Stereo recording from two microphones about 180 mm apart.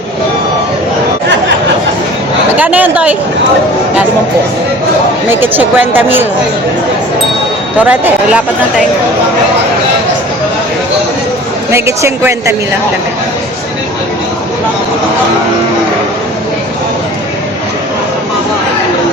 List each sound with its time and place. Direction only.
2.6 s a woman's voice: 10° right (ahead or behind)
5.3 s a woman's voice: 10° right (ahead or behind)
7.9 s a woman's voice: 5° right (ahead or behind)
11.7 s a woman's voice: 15° right (ahead or behind)